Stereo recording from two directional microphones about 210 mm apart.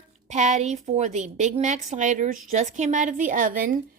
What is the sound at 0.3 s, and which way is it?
A woman's voice, 35° right (ahead or behind).